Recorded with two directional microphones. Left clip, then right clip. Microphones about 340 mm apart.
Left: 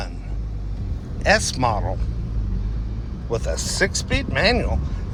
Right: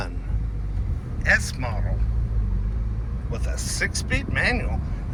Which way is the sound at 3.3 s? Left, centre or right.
Centre.